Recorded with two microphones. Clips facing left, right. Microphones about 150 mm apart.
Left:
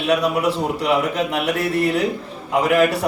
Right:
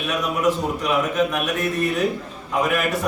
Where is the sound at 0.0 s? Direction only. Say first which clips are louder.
Left 3 dB; 30° left (ahead or behind).